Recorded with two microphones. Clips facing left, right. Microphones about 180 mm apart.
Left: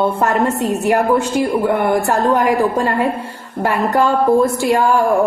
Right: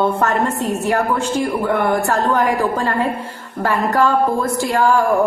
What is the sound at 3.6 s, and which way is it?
A woman's voice, 20° left (ahead or behind).